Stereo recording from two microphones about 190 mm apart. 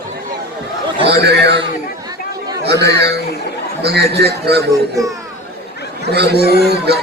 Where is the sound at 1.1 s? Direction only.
60° right (ahead or behind).